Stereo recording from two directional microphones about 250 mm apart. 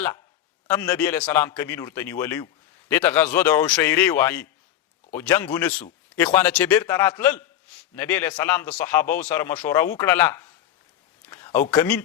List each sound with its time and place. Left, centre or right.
0.7 s speech: centre
11.3 s a sound: centre
11.7 s speech: centre